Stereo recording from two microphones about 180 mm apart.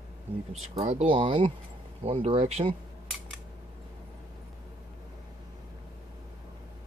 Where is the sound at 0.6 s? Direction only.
35° right (ahead or behind).